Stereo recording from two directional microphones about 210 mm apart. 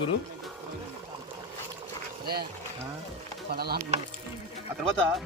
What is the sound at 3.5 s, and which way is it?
Speech, 50° right (ahead or behind).